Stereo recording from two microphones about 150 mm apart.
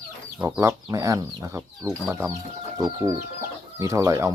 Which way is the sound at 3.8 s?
20° right (ahead or behind).